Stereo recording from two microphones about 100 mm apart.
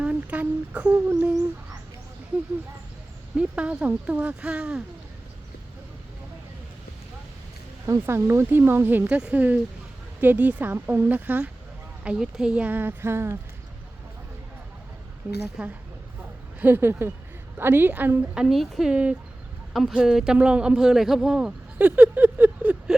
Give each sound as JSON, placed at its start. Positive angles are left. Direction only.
{"t": 0.0, "sound": "speech", "side_deg": -15}
{"t": 3.3, "sound": "speech", "side_deg": -10}
{"t": 7.9, "sound": "speech", "side_deg": -25}
{"t": 15.2, "sound": "speech", "side_deg": -15}
{"t": 16.6, "sound": "speech", "side_deg": -20}
{"t": 18.3, "sound": "speech", "side_deg": 0}
{"t": 21.8, "sound": "a sound", "side_deg": -15}